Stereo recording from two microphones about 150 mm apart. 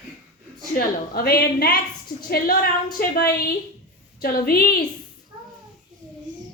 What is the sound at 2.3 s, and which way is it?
Speech, 75° left (ahead or behind).